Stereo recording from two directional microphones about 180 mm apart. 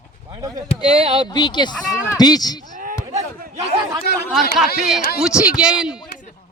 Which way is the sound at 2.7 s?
50° right (ahead or behind).